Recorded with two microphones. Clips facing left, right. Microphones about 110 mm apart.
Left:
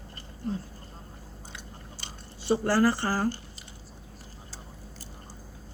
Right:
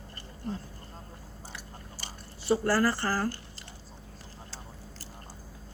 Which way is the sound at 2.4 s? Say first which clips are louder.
Left 2 dB; 20° left (ahead or behind).